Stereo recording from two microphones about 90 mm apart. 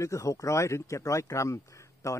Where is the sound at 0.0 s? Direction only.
35° left (ahead or behind).